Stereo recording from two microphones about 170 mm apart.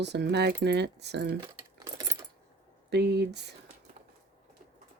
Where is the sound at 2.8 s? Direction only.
80° right.